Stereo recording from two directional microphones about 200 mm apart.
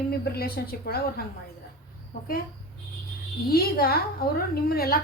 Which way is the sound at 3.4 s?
50° left (ahead or behind).